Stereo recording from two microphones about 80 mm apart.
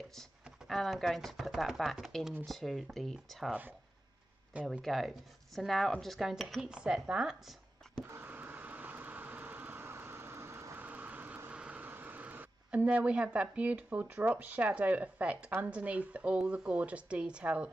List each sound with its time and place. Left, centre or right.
0.1 s speech: centre
4.6 s speech: centre
6.7 s speech: centre
8.1 s a sound: right
10.8 s vehicle: centre
11.6 s speech: right